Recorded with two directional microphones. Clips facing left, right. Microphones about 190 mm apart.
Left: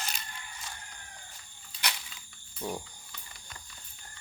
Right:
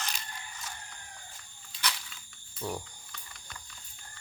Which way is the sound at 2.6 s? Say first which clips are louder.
Even; 15° left (ahead or behind).